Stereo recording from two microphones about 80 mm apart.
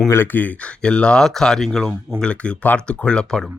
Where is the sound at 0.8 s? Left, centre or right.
Centre.